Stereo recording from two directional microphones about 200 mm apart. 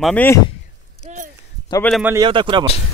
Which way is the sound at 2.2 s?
25° right (ahead or behind).